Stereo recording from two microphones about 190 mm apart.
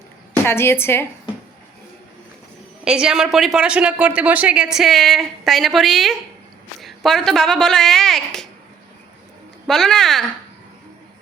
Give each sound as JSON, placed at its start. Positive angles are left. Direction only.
{"t": 0.4, "sound": "a woman's voice", "side_deg": 10}
{"t": 2.8, "sound": "speech", "side_deg": -5}
{"t": 9.6, "sound": "speech", "side_deg": 0}